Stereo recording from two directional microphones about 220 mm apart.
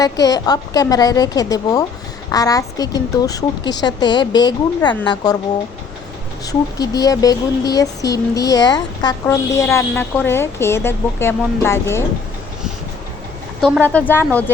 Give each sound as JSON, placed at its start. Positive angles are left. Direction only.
{"t": 0.0, "sound": "speech", "side_deg": 15}
{"t": 6.5, "sound": "speech", "side_deg": 15}
{"t": 13.6, "sound": "speech", "side_deg": -5}
{"t": 13.8, "sound": "speech", "side_deg": 10}